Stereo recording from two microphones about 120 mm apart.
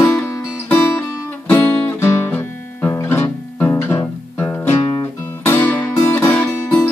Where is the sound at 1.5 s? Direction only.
20° left (ahead or behind).